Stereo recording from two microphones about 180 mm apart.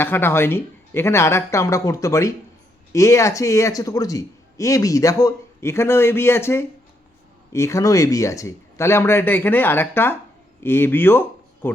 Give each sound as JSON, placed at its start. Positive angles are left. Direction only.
{"t": 0.0, "sound": "a man's voice", "side_deg": 10}